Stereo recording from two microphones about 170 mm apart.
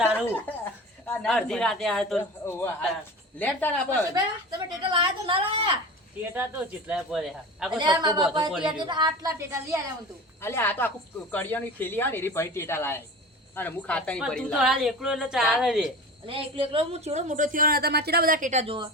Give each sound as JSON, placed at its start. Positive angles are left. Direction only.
{"t": 0.0, "sound": "a sound", "side_deg": -5}
{"t": 0.4, "sound": "a woman's voice", "side_deg": 10}
{"t": 2.4, "sound": "a man's voice", "side_deg": 15}
{"t": 4.1, "sound": "a woman's voice", "side_deg": -25}
{"t": 6.3, "sound": "a man's voice", "side_deg": -10}
{"t": 7.8, "sound": "a woman's voice", "side_deg": -25}
{"t": 10.4, "sound": "a man's voice", "side_deg": 15}
{"t": 16.2, "sound": "a woman's voice", "side_deg": -30}
{"t": 18.6, "sound": "a woman's voice", "side_deg": -30}